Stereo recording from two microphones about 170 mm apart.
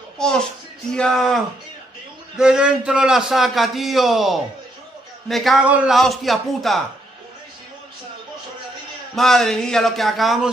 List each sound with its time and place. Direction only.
0.2 s a man's voice: 5° left (ahead or behind)
9.1 s a man's voice: centre (ahead or behind)